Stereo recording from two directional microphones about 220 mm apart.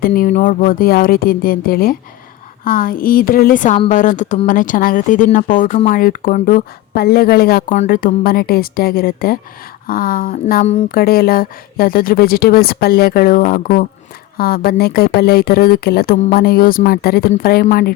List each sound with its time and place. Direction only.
0.0 s speech: 40° left (ahead or behind)